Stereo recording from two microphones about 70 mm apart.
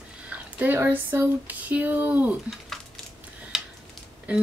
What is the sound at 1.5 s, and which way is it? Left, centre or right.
Speech, right.